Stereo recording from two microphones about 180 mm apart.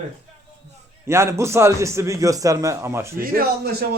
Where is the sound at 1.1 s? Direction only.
15° right (ahead or behind).